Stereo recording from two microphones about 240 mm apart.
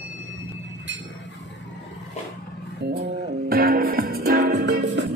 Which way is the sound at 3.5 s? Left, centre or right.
Right.